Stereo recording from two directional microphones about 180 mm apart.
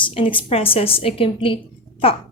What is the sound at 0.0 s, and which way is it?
A woman's voice, 30° left (ahead or behind).